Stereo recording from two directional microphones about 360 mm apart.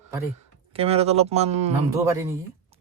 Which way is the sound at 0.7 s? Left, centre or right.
Centre.